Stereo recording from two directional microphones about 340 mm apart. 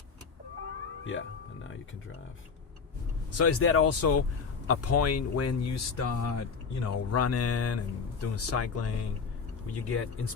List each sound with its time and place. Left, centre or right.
3.3 s speech: left